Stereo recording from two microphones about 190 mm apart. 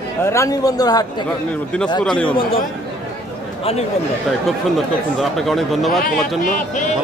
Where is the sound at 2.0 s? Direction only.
5° left (ahead or behind).